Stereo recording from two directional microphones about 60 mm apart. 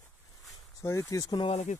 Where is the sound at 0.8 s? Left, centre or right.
Left.